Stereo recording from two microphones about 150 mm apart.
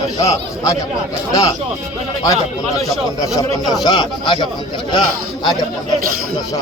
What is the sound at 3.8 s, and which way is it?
Speech, 25° left (ahead or behind).